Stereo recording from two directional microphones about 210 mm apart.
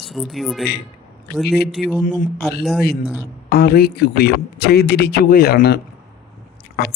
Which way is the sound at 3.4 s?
50° left (ahead or behind).